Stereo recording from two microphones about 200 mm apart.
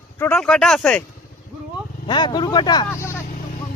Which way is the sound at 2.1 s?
20° left (ahead or behind).